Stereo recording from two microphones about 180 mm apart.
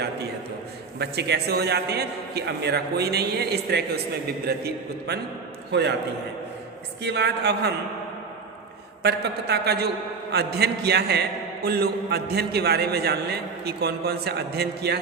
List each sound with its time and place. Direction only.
0.9 s a man's voice: 65° right (ahead or behind)
7.0 s a man's voice: 70° right (ahead or behind)
9.0 s a man's voice: 65° right (ahead or behind)